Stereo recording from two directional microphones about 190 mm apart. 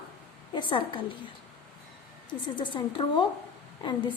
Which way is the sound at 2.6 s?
25° left (ahead or behind).